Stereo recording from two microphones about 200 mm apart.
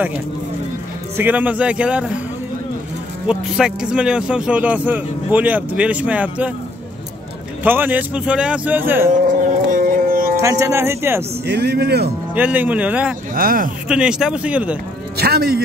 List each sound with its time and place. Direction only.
1.1 s speech: 10° right (ahead or behind)
3.3 s speech: 5° right (ahead or behind)
7.6 s speech: 10° right (ahead or behind)
9.1 s dog: 40° right (ahead or behind)
10.3 s speech: 15° right (ahead or behind)
11.4 s speech: 55° right (ahead or behind)
12.4 s speech: 10° right (ahead or behind)
13.3 s speech: 45° right (ahead or behind)
13.8 s speech: 5° right (ahead or behind)
15.1 s a man's voice: 50° right (ahead or behind)